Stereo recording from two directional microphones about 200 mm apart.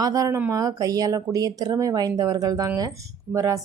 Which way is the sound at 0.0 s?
15° right (ahead or behind).